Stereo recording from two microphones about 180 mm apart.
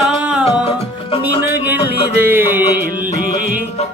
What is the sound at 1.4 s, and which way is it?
Music, 10° right (ahead or behind).